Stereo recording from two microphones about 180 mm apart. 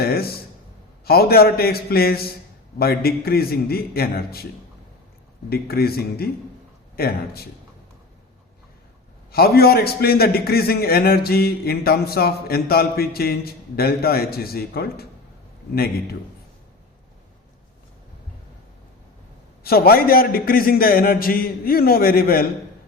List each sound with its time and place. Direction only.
0.0 s a sound: 60° left (ahead or behind)
1.0 s a man's voice: 60° left (ahead or behind)
5.5 s a man's voice: 60° left (ahead or behind)
9.3 s a man's voice: 60° left (ahead or behind)
19.6 s a man's voice: 60° left (ahead or behind)